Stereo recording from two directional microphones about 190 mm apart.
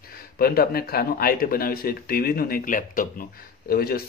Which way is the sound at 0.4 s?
55° left (ahead or behind).